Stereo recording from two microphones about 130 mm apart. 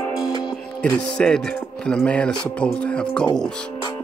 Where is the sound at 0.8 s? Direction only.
5° left (ahead or behind).